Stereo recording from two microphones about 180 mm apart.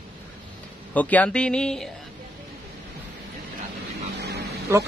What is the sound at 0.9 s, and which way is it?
Speech, 10° left (ahead or behind).